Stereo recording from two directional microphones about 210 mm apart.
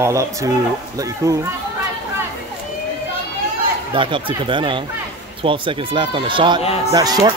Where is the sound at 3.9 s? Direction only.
25° right (ahead or behind).